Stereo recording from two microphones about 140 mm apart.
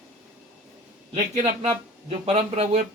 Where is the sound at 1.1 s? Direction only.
55° right (ahead or behind).